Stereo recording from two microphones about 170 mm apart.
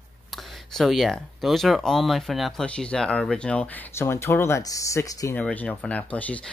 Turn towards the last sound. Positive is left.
turn(degrees=10)  # may be behind; listen again after turning